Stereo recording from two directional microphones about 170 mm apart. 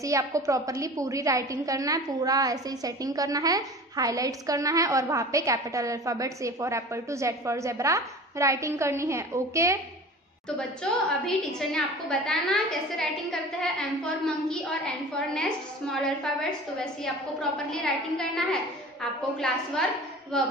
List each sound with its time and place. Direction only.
0.0 s a woman's voice: 20° right (ahead or behind)
10.8 s a woman's voice: 5° left (ahead or behind)